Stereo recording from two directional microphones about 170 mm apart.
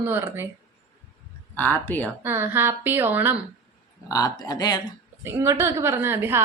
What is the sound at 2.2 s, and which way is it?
A woman's voice, 15° right (ahead or behind).